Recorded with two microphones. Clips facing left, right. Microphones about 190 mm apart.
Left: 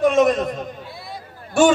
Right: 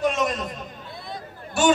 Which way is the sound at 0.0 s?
50° left (ahead or behind).